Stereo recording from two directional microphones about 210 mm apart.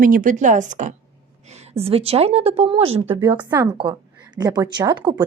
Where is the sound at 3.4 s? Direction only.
10° right (ahead or behind).